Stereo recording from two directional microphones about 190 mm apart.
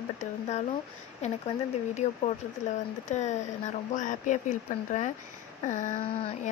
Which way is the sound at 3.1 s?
40° left (ahead or behind).